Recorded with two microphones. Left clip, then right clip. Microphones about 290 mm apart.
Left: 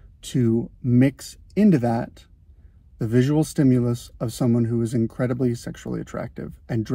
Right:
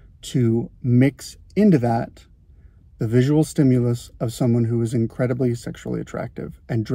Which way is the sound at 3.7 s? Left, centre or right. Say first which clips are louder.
Right 1 dB; centre.